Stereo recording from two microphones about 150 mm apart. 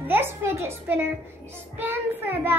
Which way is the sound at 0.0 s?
15° right (ahead or behind).